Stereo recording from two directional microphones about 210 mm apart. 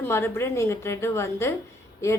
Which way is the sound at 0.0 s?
10° left (ahead or behind).